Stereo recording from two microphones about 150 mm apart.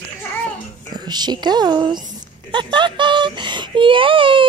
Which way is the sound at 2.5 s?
30° right (ahead or behind).